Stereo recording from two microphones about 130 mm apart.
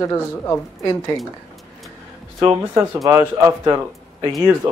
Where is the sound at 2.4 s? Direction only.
30° right (ahead or behind).